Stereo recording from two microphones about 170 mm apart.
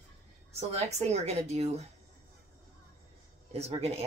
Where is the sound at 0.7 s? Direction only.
40° right (ahead or behind).